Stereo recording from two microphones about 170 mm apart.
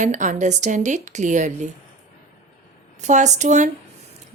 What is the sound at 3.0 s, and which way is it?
Speech, 45° right (ahead or behind).